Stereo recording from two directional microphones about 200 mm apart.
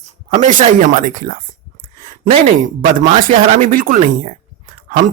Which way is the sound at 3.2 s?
45° right (ahead or behind).